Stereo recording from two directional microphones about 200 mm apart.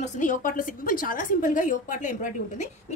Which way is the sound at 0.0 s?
40° left (ahead or behind).